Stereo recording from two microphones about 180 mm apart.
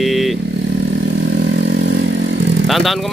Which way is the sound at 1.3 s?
75° right (ahead or behind).